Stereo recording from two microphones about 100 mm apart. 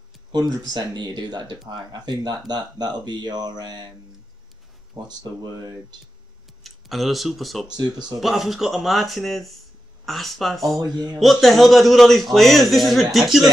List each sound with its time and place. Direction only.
0.3 s speech: 45° right (ahead or behind)
4.9 s speech: 45° right (ahead or behind)
6.6 s speech: centre (ahead or behind)
7.6 s speech: 45° right (ahead or behind)
8.2 s a man's voice: centre (ahead or behind)